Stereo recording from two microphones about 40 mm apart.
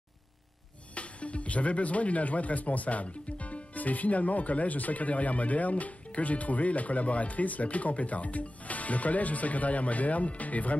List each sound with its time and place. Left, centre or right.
0.9 s speech: left